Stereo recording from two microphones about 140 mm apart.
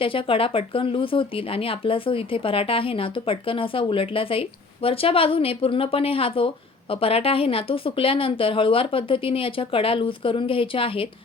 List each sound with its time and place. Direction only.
0.0 s speech: 40° left (ahead or behind)